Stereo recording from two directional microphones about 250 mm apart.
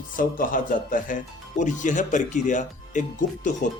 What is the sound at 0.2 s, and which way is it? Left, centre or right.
Speech, left.